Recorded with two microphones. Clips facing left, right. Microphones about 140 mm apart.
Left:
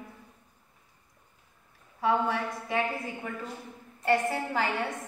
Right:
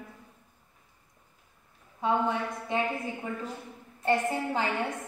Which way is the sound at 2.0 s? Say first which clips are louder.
Even; 20° right (ahead or behind).